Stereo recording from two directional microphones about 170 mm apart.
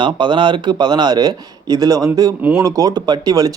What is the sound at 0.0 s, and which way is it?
Speech, 30° right (ahead or behind).